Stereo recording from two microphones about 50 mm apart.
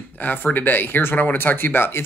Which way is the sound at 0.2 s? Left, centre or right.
Left.